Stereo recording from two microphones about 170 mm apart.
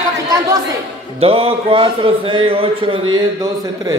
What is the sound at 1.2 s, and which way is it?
A man's voice, 35° right (ahead or behind).